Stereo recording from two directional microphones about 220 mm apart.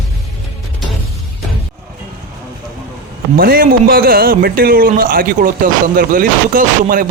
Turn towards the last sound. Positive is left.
turn(degrees=-40)  # may be behind; listen again after turning